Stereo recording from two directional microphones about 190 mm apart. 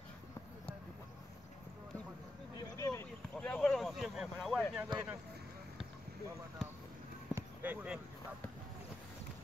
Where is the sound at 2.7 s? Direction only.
15° left (ahead or behind); by 4.6 s centre (ahead or behind).